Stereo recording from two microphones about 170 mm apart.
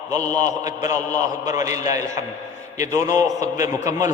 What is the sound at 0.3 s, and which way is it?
A man's voice, 20° right (ahead or behind).